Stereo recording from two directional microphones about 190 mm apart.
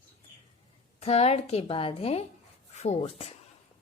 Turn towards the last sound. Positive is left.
turn(degrees=30)  # may be behind; listen again after turning